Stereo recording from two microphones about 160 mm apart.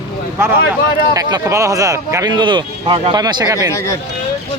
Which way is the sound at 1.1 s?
20° right (ahead or behind).